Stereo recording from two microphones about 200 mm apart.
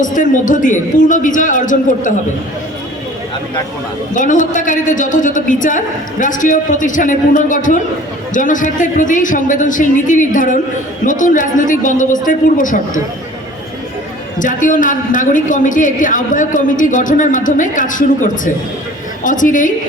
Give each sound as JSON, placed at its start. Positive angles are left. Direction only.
{"t": 0.0, "sound": "a man's voice", "side_deg": 40}
{"t": 4.1, "sound": "a man's voice", "side_deg": 40}
{"t": 14.3, "sound": "a man's voice", "side_deg": 40}